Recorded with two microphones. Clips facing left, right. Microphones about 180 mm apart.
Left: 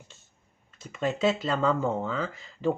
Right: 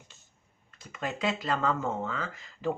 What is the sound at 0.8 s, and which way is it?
Speech, 25° left (ahead or behind).